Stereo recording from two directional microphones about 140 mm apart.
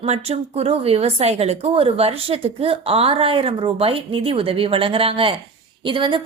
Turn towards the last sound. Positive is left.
turn(degrees=-35)  # may be behind; listen again after turning